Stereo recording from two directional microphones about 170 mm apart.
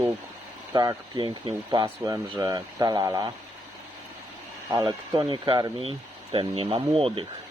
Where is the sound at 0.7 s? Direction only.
25° right (ahead or behind).